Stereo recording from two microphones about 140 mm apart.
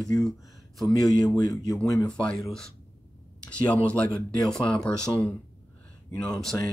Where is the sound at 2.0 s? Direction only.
5° left (ahead or behind).